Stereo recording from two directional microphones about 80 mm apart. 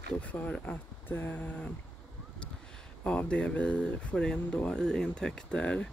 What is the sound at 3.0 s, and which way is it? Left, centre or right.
Speech, centre.